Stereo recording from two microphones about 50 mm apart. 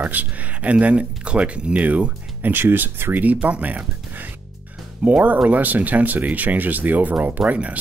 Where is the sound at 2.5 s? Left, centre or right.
Right.